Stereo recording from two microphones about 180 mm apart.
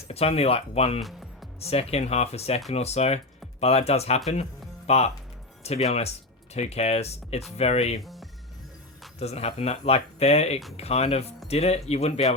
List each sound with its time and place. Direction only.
0.1 s speech: 35° left (ahead or behind)
1.0 s music: centre (ahead or behind)
1.5 s speech: 35° left (ahead or behind)
8.0 s music: centre (ahead or behind)
9.1 s speech: 35° left (ahead or behind)